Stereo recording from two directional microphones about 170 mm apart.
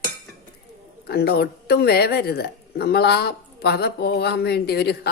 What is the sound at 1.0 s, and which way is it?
A woman's voice, 70° left (ahead or behind).